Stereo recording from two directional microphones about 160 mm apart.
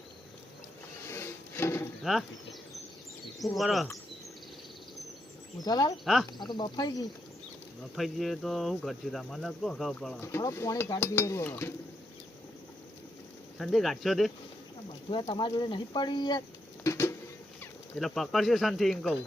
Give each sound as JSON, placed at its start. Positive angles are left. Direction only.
{"t": 1.0, "sound": "wood", "side_deg": 15}
{"t": 2.0, "sound": "speech", "side_deg": 0}
{"t": 5.5, "sound": "speech", "side_deg": 25}
{"t": 7.9, "sound": "speech", "side_deg": 0}
{"t": 10.2, "sound": "dishes", "side_deg": 15}
{"t": 13.6, "sound": "speech", "side_deg": 0}
{"t": 15.1, "sound": "speech", "side_deg": 30}
{"t": 16.8, "sound": "a sound", "side_deg": 15}
{"t": 17.6, "sound": "speech", "side_deg": 5}